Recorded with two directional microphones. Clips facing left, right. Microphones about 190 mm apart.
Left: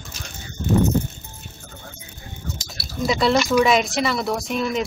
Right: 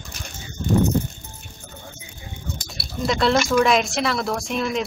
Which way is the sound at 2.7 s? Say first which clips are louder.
Left 1 dB; centre (ahead or behind).